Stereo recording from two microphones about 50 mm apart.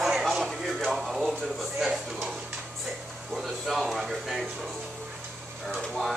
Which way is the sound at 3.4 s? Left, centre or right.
Centre.